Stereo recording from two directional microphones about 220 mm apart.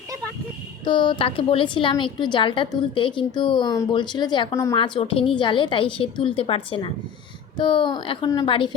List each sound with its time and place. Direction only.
0.9 s a woman's voice: 20° left (ahead or behind)